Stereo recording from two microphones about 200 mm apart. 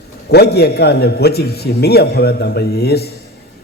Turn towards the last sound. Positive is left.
turn(degrees=55)  # may be behind; listen again after turning